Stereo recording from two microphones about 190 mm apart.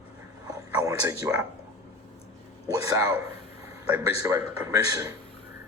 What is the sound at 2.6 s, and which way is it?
A man's voice, 15° right (ahead or behind).